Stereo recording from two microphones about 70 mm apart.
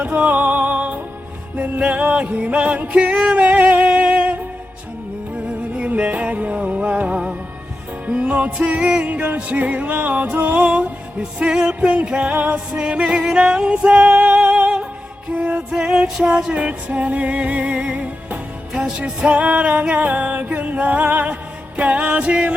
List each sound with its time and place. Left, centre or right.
0.0 s music: centre